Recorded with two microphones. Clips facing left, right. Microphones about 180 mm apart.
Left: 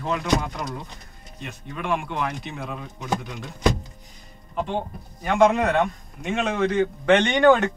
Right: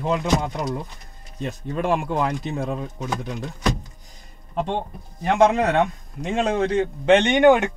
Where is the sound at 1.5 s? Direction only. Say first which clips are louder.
Right 5 dB; 40° right (ahead or behind).